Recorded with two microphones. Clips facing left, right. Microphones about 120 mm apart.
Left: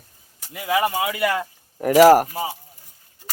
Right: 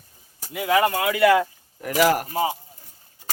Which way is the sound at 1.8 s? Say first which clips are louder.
Left 8 dB; 40° left (ahead or behind).